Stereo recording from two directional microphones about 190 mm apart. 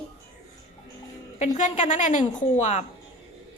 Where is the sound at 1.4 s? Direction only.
40° left (ahead or behind).